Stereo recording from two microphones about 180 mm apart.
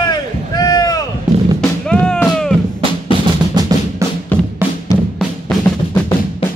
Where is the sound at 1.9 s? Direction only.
5° left (ahead or behind).